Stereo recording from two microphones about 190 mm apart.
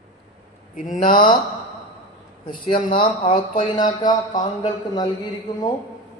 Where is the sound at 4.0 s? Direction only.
25° left (ahead or behind).